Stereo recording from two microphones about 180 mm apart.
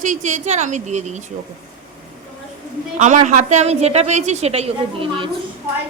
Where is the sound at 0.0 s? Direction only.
45° right (ahead or behind).